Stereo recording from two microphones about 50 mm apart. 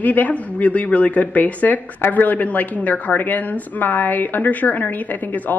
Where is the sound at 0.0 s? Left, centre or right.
Left.